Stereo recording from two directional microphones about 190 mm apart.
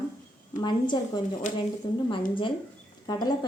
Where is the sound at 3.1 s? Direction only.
20° left (ahead or behind).